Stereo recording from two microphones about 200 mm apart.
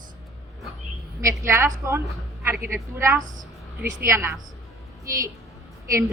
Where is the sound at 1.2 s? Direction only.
15° right (ahead or behind).